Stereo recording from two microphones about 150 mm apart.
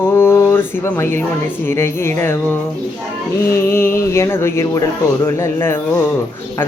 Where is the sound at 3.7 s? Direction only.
15° left (ahead or behind).